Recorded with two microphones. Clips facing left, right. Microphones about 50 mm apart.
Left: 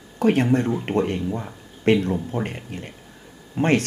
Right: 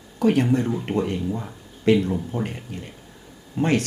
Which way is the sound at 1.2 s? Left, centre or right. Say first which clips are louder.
Even; centre.